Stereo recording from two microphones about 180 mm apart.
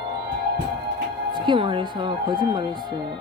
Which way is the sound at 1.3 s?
25° right (ahead or behind).